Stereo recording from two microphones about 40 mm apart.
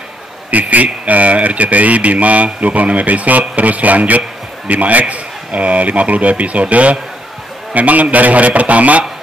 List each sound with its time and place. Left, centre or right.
0.5 s speech: right